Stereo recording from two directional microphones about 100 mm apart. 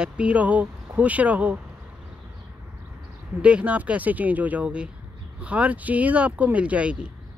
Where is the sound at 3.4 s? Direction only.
10° right (ahead or behind).